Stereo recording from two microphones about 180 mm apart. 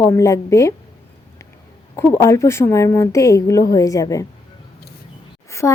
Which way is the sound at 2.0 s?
15° left (ahead or behind).